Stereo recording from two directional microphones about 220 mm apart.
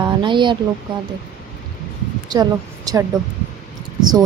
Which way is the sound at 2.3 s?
15° right (ahead or behind).